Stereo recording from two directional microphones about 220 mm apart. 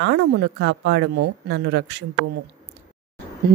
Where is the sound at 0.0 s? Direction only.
50° right (ahead or behind).